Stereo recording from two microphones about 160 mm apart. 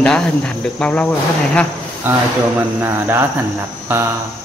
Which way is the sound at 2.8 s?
15° right (ahead or behind).